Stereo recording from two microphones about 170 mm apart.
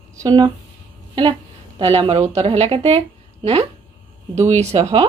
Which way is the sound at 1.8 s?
35° right (ahead or behind).